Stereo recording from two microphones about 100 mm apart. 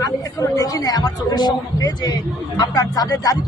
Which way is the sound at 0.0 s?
35° left (ahead or behind).